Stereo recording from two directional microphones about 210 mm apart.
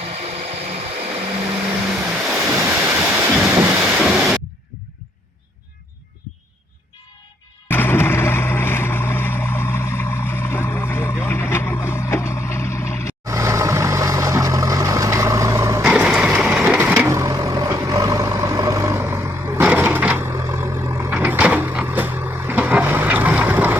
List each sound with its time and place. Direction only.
0.0 s a sound: 30° right (ahead or behind)
2.3 s waves: 10° right (ahead or behind)
7.7 s boat: 10° left (ahead or behind)
13.2 s vehicle: 15° right (ahead or behind)